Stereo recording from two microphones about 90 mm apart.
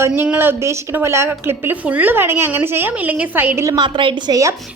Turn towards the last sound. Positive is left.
turn(degrees=-35)  # may be behind; listen again after turning